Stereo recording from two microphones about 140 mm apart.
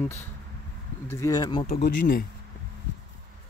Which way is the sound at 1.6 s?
85° left.